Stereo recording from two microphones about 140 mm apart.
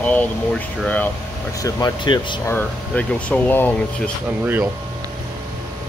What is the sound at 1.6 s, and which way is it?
Speech, 25° left (ahead or behind).